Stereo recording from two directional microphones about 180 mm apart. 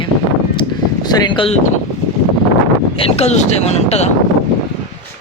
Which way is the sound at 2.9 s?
35° left (ahead or behind).